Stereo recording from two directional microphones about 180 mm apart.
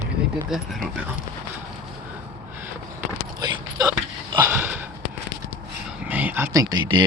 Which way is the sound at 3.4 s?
20° right (ahead or behind).